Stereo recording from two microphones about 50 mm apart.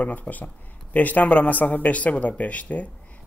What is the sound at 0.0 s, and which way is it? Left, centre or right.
Speech, left.